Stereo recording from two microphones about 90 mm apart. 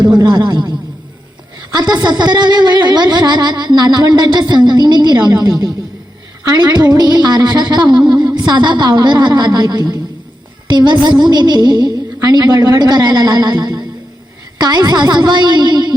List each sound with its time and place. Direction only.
0.2 s speech: 55° right (ahead or behind)